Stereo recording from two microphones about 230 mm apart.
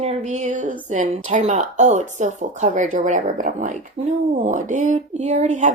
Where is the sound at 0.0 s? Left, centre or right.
Right.